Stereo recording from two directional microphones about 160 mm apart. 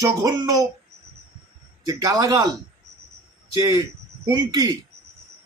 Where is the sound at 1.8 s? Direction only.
20° right (ahead or behind).